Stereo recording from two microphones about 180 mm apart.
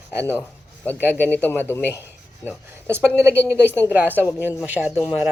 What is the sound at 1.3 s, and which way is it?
Speech, 10° left (ahead or behind).